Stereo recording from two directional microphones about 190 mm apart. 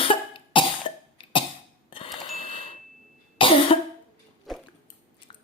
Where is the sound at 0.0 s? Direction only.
25° left (ahead or behind).